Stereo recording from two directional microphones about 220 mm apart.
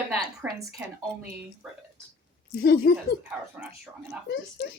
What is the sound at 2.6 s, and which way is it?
Speech, 45° left (ahead or behind).